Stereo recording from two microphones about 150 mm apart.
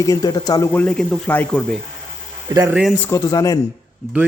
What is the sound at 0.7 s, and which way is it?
Speech, 10° left (ahead or behind).